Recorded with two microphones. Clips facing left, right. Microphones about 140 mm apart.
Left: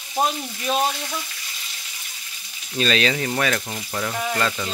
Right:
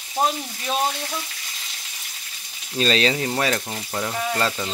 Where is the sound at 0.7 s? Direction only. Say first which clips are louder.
Left 2 dB; centre (ahead or behind).